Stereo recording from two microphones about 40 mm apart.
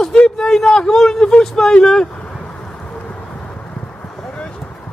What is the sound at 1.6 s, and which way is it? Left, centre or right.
Vehicle, centre.